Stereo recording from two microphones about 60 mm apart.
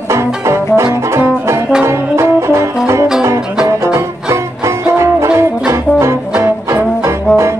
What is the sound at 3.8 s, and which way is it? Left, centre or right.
Music, right.